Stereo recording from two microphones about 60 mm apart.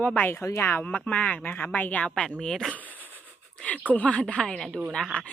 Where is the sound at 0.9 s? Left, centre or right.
Centre.